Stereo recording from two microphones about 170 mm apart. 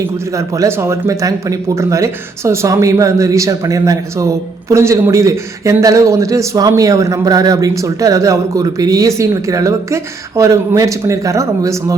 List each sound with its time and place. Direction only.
0.3 s a man's voice: 20° right (ahead or behind)